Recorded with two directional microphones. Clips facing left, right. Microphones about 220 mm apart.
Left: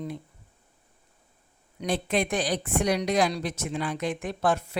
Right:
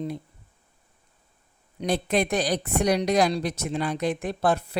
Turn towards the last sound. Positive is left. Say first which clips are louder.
# right 2 dB
turn(degrees=-35)  # may be behind; listen again after turning